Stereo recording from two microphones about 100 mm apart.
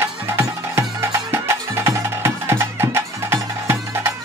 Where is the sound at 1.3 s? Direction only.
25° right (ahead or behind).